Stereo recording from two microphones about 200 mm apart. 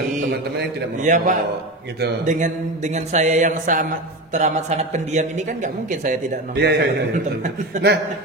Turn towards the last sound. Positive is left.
turn(degrees=-35)  # may be behind; listen again after turning